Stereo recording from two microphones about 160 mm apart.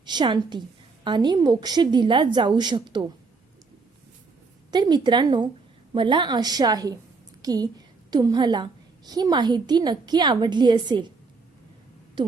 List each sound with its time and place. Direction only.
0.0 s a woman's voice: 30° right (ahead or behind)
4.7 s a woman's voice: 25° right (ahead or behind)